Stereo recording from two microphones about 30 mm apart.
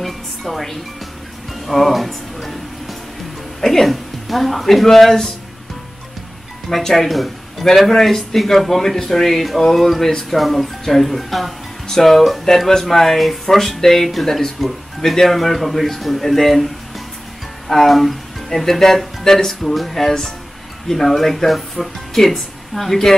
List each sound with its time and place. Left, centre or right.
0.0 s music: centre
1.7 s a woman's voice: centre
6.9 s a woman's voice: centre